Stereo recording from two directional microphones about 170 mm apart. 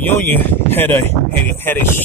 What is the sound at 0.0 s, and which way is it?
Speech, 10° left (ahead or behind).